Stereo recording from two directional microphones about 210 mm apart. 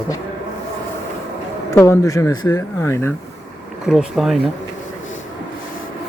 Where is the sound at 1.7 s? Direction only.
15° left (ahead or behind).